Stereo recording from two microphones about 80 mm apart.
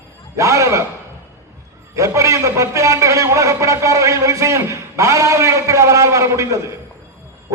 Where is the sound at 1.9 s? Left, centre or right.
Right.